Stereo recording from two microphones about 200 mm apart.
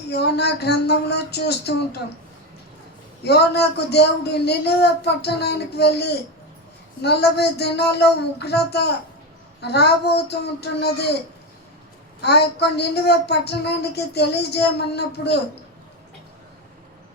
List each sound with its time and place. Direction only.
0.1 s a woman's voice: 55° left (ahead or behind)
3.2 s a woman's voice: 55° left (ahead or behind)
12.2 s a woman's voice: 55° left (ahead or behind)